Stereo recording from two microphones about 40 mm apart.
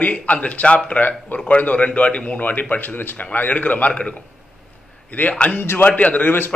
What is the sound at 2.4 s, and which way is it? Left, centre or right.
Speech, left.